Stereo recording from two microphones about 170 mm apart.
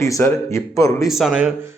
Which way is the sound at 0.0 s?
15° left (ahead or behind).